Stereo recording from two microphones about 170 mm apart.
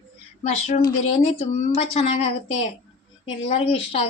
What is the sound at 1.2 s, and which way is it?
Speech, 45° left (ahead or behind).